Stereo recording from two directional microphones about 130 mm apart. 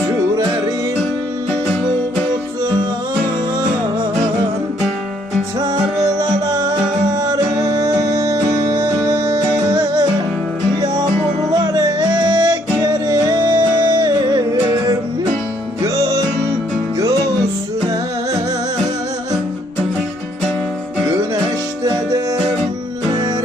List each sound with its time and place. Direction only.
5.5 s music: 35° right (ahead or behind)
9.0 s music: 25° right (ahead or behind)
11.6 s music: 30° right (ahead or behind)